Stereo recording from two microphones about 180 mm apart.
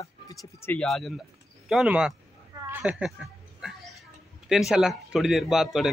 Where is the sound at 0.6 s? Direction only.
10° left (ahead or behind).